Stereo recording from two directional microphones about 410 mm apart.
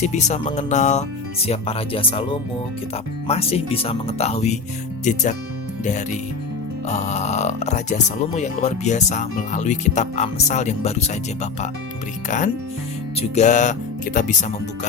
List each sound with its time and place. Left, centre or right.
0.0 s speech: centre
3.2 s speech: centre
13.1 s speech: centre